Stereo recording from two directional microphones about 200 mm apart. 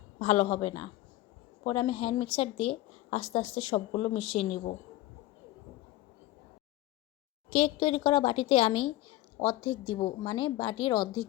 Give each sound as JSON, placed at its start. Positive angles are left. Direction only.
{"t": 0.2, "sound": "a woman's voice", "side_deg": 35}
{"t": 1.6, "sound": "speech", "side_deg": 25}
{"t": 7.5, "sound": "speech", "side_deg": 30}